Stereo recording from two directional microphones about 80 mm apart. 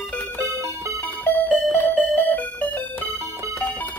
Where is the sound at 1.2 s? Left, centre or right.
Left.